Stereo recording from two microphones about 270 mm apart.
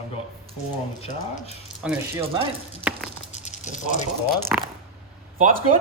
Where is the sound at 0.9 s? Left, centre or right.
Left.